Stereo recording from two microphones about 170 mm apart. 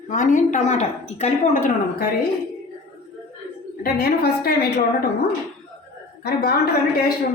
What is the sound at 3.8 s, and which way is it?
Speech, 70° left (ahead or behind).